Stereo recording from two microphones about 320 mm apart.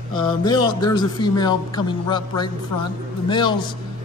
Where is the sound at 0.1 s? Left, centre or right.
Centre.